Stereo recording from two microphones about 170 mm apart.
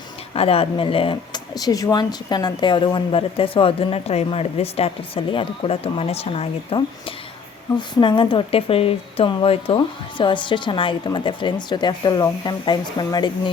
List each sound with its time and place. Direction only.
0.3 s speech: 35° left (ahead or behind)